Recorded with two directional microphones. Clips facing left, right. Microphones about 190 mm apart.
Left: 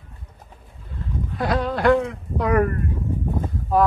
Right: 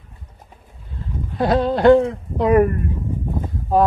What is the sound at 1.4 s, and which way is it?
Speech, 30° right (ahead or behind).